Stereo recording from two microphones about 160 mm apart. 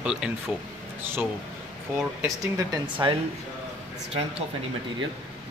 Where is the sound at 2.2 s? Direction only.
25° right (ahead or behind).